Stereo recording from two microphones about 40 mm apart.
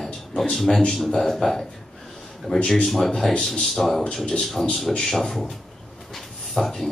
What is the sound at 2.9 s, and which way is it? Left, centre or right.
A man's voice, centre.